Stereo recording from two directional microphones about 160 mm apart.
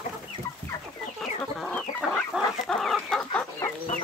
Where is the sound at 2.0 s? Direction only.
5° right (ahead or behind).